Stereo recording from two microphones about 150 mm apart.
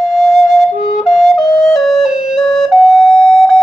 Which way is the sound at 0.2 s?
Centre (ahead or behind).